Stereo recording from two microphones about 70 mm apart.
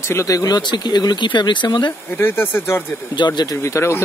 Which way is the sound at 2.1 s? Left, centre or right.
Left.